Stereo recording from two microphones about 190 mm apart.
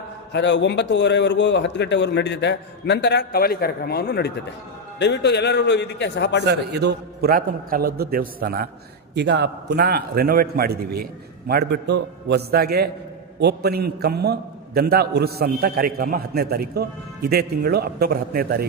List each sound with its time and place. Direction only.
0.3 s a man's voice: 65° left (ahead or behind)
6.4 s a man's voice: 60° right (ahead or behind)
9.1 s a man's voice: 65° right (ahead or behind)